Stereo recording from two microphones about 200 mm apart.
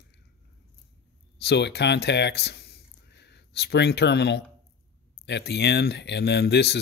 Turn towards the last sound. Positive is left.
turn(degrees=55)  # may be behind; listen again after turning